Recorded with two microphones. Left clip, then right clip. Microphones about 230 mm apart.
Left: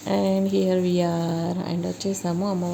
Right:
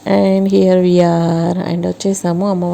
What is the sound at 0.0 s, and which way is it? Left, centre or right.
Speech, right.